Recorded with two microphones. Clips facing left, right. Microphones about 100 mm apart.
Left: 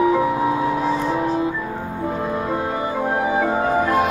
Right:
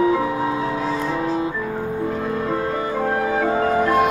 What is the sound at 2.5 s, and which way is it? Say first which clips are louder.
Music: even; 15° left (ahead or behind).